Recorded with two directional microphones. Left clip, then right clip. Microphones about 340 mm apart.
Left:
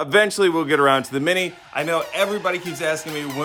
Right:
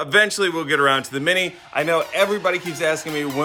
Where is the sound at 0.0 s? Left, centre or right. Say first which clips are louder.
Even; centre.